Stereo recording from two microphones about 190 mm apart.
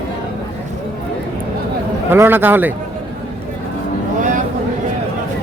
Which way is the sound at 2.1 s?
10° right (ahead or behind).